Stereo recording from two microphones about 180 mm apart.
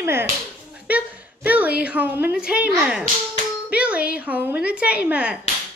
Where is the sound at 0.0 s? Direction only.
15° right (ahead or behind).